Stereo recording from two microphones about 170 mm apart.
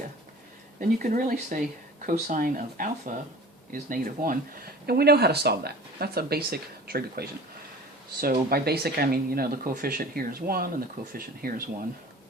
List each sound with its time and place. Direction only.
0.8 s speech: 50° right (ahead or behind)